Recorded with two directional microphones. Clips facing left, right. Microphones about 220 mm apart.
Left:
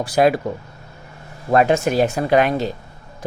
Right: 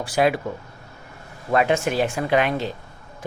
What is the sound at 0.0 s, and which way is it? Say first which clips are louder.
Speech: left 4 dB; 40° left (ahead or behind).